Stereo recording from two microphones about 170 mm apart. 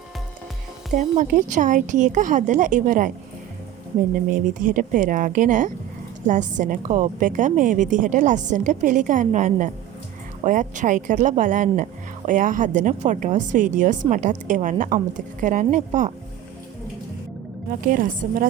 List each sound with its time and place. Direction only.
0.9 s speech: 45° right (ahead or behind)
4.6 s speech: 50° right (ahead or behind)
17.8 s speech: 55° right (ahead or behind)